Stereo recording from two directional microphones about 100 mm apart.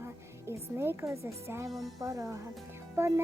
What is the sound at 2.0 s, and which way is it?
A woman's voice, 35° right (ahead or behind).